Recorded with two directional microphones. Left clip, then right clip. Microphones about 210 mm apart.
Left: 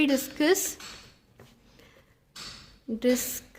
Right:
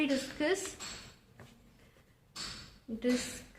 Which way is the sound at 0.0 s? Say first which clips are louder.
Left 7 dB; 50° left (ahead or behind).